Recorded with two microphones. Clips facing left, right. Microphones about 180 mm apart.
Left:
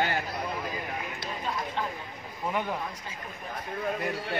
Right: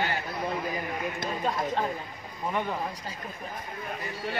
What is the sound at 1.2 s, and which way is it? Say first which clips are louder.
Speech: right 5 dB; 45° right (ahead or behind).